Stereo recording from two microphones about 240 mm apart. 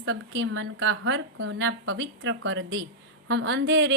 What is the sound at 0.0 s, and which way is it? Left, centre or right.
A woman's voice, right.